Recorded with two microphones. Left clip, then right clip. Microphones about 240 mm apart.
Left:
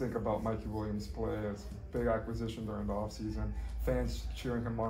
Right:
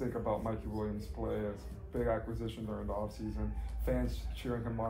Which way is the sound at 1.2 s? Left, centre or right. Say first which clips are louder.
Left 1 dB; left.